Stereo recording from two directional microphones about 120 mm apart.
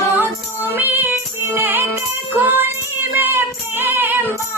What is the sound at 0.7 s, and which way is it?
Music, 15° right (ahead or behind).